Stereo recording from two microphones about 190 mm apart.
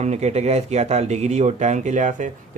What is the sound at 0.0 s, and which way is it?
Speech, 35° right (ahead or behind).